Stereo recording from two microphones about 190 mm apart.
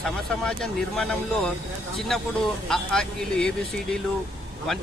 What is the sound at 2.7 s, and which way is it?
Speech, 5° left (ahead or behind).